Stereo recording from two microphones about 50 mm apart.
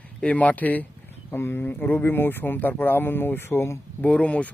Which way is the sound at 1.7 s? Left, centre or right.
Left.